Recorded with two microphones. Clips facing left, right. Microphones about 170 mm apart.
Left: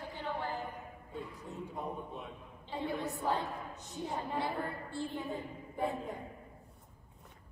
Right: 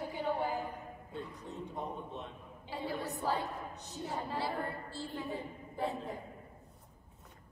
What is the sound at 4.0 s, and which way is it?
A woman's voice, 15° left (ahead or behind).